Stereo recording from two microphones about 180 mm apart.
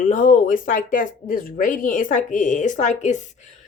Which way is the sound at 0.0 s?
45° left (ahead or behind).